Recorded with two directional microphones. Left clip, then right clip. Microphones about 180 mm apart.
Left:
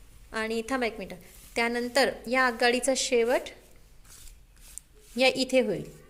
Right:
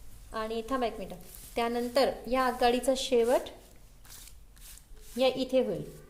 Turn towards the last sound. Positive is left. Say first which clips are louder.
# left 3 dB
turn(degrees=25)  # may be behind; listen again after turning